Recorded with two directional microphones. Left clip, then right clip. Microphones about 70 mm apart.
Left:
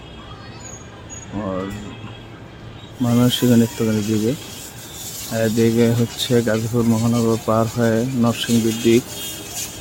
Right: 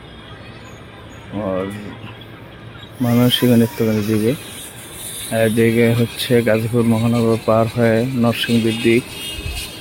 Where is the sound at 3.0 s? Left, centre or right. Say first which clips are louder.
Right 2 dB; centre.